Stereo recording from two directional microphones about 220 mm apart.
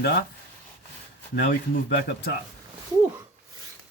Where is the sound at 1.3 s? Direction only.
50° left (ahead or behind).